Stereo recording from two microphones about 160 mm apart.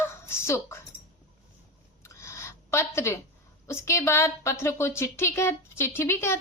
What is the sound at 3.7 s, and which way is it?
A woman's voice, 15° left (ahead or behind).